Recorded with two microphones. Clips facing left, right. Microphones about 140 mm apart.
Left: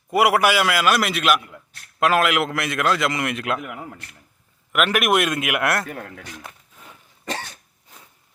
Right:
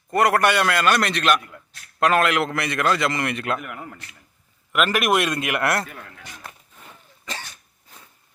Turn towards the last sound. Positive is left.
turn(degrees=60)  # may be behind; listen again after turning